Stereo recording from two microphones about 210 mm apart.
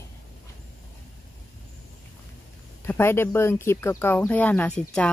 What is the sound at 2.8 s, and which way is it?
Speech, 10° left (ahead or behind).